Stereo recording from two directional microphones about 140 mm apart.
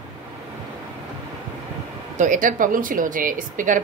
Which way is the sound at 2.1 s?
65° right (ahead or behind).